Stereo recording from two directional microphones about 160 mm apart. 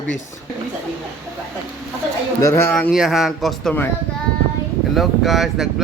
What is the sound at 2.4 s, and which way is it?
Speech, 20° left (ahead or behind).